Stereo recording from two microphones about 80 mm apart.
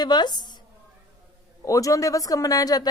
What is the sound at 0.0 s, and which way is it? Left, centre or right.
Speech, left.